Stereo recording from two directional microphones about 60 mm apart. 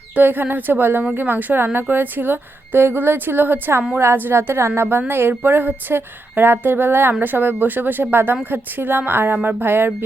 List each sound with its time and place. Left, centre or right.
0.2 s a woman's voice: right